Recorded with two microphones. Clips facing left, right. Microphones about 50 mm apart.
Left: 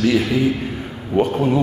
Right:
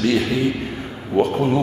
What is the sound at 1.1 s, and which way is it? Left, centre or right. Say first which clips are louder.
Speech: left 1 dB; centre.